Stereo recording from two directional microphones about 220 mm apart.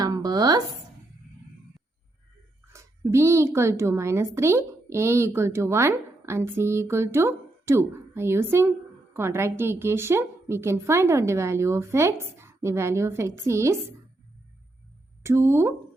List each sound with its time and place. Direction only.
0.0 s a sound: 15° right (ahead or behind)
2.7 s a woman's voice: 15° right (ahead or behind)
15.2 s a woman's voice: 10° right (ahead or behind)